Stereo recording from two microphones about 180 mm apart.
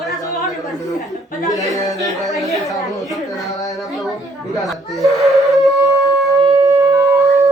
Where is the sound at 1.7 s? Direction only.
20° left (ahead or behind).